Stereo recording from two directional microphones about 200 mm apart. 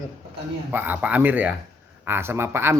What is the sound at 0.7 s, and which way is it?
Speech, 10° right (ahead or behind).